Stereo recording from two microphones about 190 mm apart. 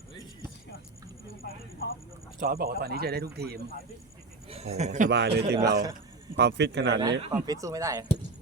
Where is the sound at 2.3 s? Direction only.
50° right (ahead or behind).